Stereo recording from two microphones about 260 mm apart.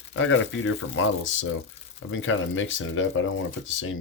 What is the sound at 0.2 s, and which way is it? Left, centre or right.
Speech, left.